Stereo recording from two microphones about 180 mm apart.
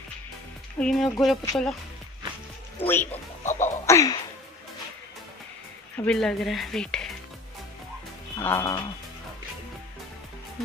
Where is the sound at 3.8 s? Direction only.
15° left (ahead or behind).